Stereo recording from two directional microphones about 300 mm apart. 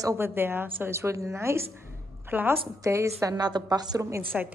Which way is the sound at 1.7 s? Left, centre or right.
Centre.